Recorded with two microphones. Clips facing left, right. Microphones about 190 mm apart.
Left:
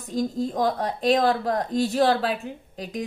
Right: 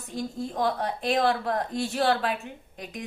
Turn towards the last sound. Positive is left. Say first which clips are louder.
# left 7 dB
turn(degrees=35)  # may be behind; listen again after turning